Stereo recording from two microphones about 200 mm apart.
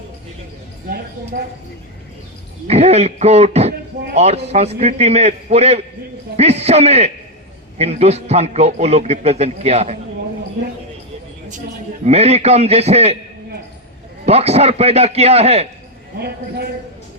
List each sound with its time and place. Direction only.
2.6 s speech: 30° right (ahead or behind)
12.0 s speech: 30° right (ahead or behind)
14.3 s speech: 30° right (ahead or behind)
16.1 s speech: 55° right (ahead or behind)